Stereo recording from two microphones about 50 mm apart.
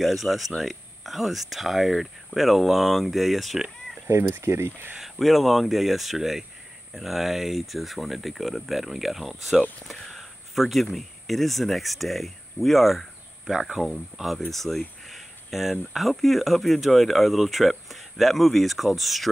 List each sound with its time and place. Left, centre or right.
0.0 s speech: centre
4.3 s speech: right
4.9 s speech: centre
13.5 s speech: centre